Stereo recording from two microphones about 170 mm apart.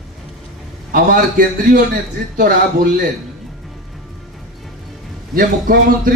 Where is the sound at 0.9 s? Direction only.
55° right (ahead or behind).